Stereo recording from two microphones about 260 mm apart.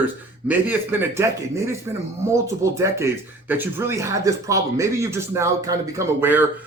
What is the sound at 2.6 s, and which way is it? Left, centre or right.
Speech, centre.